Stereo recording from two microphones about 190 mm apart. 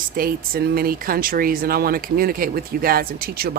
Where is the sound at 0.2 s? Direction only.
50° right (ahead or behind).